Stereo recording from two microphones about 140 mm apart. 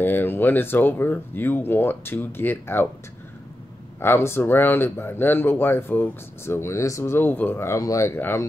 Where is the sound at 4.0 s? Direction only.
15° left (ahead or behind).